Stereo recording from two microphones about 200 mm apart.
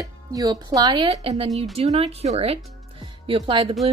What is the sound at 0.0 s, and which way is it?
A woman's voice, 15° right (ahead or behind).